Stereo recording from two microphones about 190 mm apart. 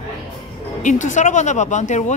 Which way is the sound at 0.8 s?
40° left (ahead or behind).